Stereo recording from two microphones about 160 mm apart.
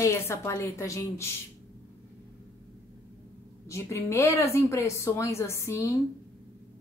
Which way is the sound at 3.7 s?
15° left (ahead or behind).